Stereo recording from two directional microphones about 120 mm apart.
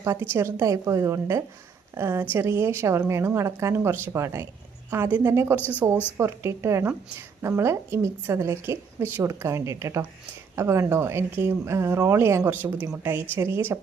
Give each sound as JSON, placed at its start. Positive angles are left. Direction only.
{"t": 0.0, "sound": "a woman's voice", "side_deg": -25}
{"t": 5.5, "sound": "speech", "side_deg": 15}
{"t": 6.1, "sound": "a woman's voice", "side_deg": -25}